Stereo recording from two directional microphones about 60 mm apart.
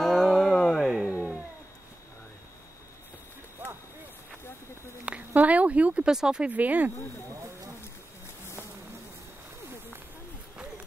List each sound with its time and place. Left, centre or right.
0.0 s music: centre
1.1 s cat: right
5.3 s a sound: right
6.0 s speech: centre
6.5 s speech: right